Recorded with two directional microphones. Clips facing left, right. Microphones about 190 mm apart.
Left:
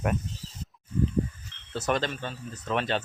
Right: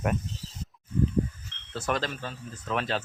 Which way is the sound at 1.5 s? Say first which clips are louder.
Right 2 dB; 65° right (ahead or behind).